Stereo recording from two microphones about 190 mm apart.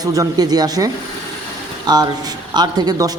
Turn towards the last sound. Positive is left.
turn(degrees=-20)  # may be behind; listen again after turning